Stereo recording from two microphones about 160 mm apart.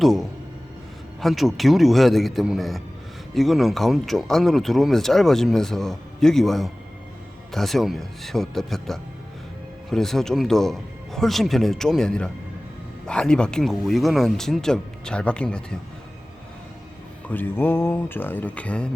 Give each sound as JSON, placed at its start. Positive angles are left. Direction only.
{"t": 0.0, "sound": "speech", "side_deg": 0}
{"t": 17.2, "sound": "speech", "side_deg": 10}